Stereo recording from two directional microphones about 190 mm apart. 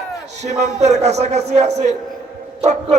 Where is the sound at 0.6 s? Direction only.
35° right (ahead or behind).